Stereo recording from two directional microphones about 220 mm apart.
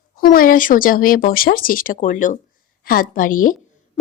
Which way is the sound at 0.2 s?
40° left (ahead or behind).